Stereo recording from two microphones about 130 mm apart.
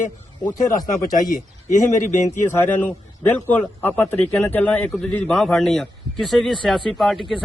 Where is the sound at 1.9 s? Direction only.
70° left (ahead or behind).